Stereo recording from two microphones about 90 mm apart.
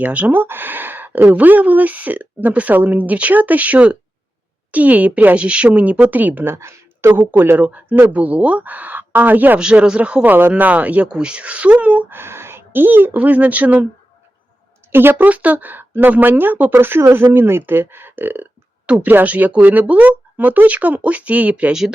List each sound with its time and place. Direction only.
0.0 s speech: 15° right (ahead or behind)
9.6 s speech: 10° right (ahead or behind)
12.0 s a woman's voice: 25° right (ahead or behind)
14.9 s speech: 25° right (ahead or behind); by 21.9 s 5° right (ahead or behind)